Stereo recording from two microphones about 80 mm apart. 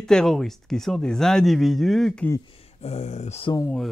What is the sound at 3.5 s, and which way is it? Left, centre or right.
Speech, left.